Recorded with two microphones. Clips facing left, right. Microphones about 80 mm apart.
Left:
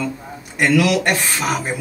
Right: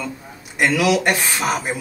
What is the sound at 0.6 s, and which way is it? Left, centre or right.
Speech, centre.